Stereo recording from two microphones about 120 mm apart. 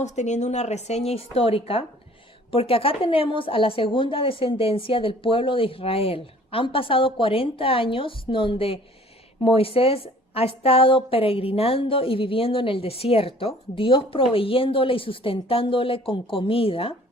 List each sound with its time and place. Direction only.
0.0 s a woman's voice: 75° left (ahead or behind); by 16.9 s 50° left (ahead or behind)